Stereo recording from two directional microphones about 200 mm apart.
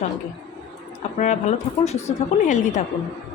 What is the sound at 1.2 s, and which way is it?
A woman's voice, 35° left (ahead or behind).